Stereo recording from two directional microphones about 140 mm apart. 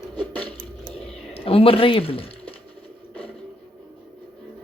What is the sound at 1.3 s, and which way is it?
Speech, 40° left (ahead or behind).